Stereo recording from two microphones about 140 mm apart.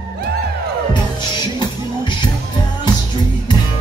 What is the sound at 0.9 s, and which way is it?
Music, 30° left (ahead or behind).